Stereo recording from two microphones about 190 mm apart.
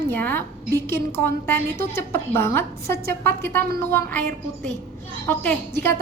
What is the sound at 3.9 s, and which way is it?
Speech, 10° left (ahead or behind).